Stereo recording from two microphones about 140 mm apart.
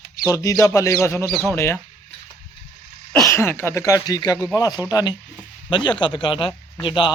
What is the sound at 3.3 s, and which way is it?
Speech, 15° left (ahead or behind).